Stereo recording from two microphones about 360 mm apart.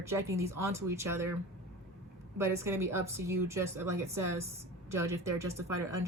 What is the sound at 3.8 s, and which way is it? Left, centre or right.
Speech, right.